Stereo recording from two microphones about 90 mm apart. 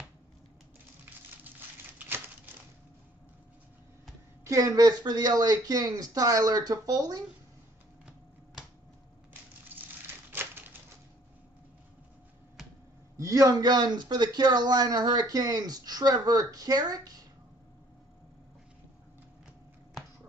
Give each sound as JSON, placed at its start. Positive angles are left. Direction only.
{"t": 2.0, "sound": "crumpling", "side_deg": -25}
{"t": 4.5, "sound": "a man's voice", "side_deg": -40}
{"t": 9.7, "sound": "crumpling", "side_deg": -20}
{"t": 10.3, "sound": "typewriter", "side_deg": -25}
{"t": 13.2, "sound": "a man's voice", "side_deg": -40}